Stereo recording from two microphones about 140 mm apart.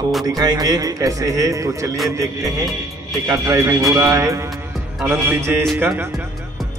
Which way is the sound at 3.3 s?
20° right (ahead or behind).